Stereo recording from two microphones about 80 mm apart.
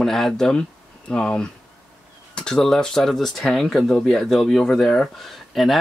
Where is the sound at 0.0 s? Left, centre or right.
Centre.